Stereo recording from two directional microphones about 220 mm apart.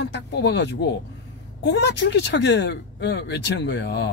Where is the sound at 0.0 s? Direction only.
50° left (ahead or behind).